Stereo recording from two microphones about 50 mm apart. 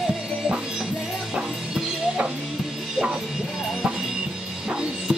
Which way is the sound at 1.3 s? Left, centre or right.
Centre.